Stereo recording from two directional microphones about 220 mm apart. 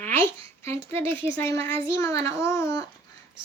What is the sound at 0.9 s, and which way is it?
Speech, 10° left (ahead or behind).